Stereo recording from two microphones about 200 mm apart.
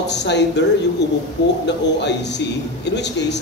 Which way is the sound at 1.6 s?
60° left (ahead or behind).